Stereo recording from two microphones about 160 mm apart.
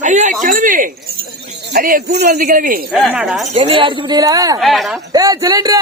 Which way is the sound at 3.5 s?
40° right (ahead or behind).